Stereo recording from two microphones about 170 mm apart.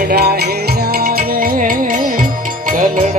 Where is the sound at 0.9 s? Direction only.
60° right (ahead or behind).